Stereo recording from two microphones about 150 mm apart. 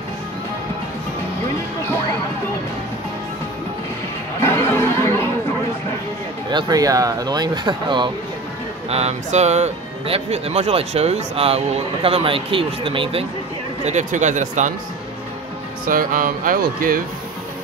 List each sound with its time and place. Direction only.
4.4 s chatter: 15° left (ahead or behind)
6.5 s speech: 25° right (ahead or behind)
8.9 s speech: 45° right (ahead or behind)
13.8 s speech: 50° right (ahead or behind)
15.9 s speech: 65° right (ahead or behind)